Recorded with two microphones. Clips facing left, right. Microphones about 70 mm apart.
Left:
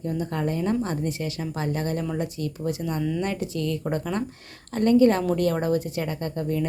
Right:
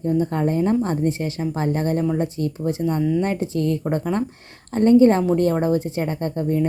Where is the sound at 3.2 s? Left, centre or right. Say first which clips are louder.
Right 5 dB; right.